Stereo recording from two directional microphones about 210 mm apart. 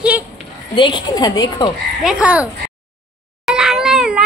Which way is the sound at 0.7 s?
20° left (ahead or behind).